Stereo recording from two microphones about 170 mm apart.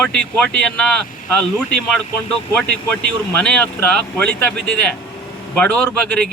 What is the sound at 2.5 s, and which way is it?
Speech, 5° left (ahead or behind).